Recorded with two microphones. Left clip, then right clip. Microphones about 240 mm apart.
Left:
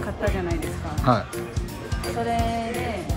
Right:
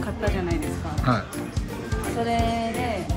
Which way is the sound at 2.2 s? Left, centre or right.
Centre.